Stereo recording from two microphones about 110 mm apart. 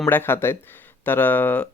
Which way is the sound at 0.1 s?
20° left (ahead or behind).